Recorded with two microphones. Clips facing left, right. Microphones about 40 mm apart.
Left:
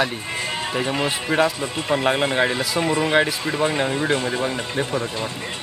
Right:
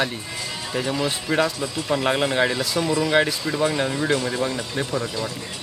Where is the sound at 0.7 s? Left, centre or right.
Left.